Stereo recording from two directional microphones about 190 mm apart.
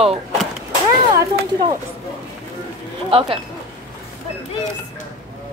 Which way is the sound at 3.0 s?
30° right (ahead or behind).